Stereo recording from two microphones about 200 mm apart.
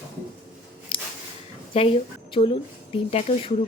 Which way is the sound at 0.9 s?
25° left (ahead or behind).